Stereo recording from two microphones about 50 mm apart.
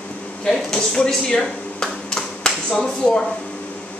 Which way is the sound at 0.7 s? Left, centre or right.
Centre.